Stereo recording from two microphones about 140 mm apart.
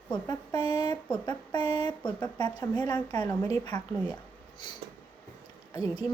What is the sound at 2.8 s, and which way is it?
Speech, 30° left (ahead or behind).